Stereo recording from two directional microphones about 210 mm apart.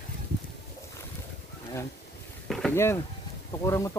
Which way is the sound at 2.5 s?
Centre (ahead or behind).